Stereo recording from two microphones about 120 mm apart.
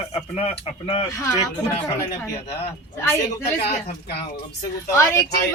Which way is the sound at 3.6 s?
60° left (ahead or behind).